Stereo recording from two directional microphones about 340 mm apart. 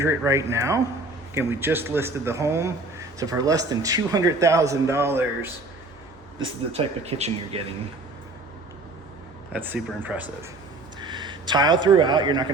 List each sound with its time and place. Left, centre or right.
0.0 s a man's voice: centre
6.4 s a man's voice: centre
9.5 s speech: centre